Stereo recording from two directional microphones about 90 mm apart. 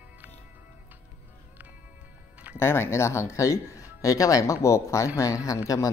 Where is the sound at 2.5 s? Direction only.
30° left (ahead or behind).